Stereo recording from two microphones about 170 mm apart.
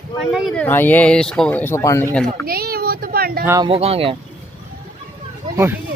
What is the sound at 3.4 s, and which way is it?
Speech, 20° right (ahead or behind).